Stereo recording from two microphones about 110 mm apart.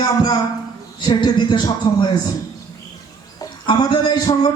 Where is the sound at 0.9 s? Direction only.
45° left (ahead or behind).